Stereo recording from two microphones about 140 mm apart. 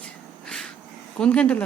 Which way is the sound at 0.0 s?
5° left (ahead or behind).